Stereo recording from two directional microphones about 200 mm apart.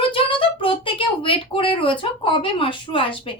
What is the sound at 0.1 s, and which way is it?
A woman's voice, 25° left (ahead or behind).